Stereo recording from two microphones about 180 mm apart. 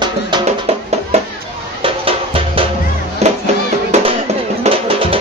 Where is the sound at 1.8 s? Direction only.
30° right (ahead or behind).